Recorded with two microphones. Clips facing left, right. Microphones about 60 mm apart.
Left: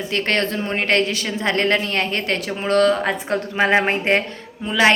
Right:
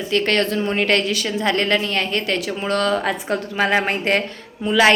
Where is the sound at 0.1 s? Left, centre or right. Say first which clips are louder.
Right 3 dB; left.